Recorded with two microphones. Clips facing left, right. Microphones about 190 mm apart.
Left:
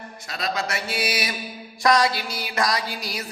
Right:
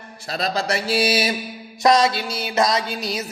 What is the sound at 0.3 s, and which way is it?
Music, 35° right (ahead or behind).